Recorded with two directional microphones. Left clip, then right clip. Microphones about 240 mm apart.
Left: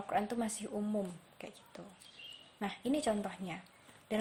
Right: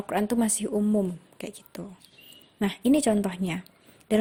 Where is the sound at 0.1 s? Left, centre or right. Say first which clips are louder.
Right 9 dB; right.